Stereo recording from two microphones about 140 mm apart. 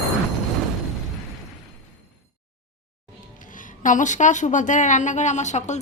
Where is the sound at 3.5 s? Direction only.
70° left (ahead or behind).